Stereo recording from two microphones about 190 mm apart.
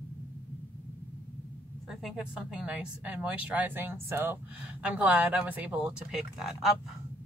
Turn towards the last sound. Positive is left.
turn(degrees=-5)  # may be behind; listen again after turning